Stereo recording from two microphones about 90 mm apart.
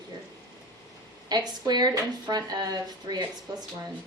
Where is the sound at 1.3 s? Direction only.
50° right (ahead or behind).